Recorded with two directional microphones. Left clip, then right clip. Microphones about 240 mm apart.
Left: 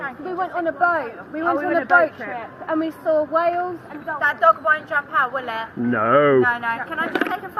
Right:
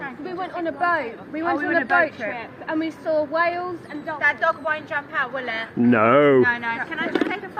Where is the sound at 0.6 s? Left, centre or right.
Right.